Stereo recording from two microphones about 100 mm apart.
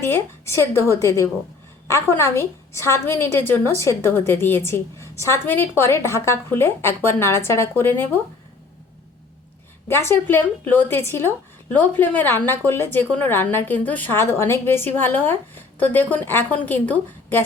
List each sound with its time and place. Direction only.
0.0 s a woman's voice: 25° left (ahead or behind)
9.9 s a woman's voice: 25° left (ahead or behind)